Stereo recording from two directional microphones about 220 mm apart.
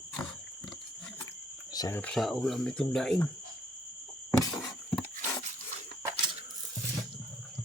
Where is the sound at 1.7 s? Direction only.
15° left (ahead or behind).